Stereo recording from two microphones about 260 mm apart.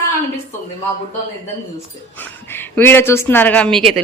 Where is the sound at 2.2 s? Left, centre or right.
Centre.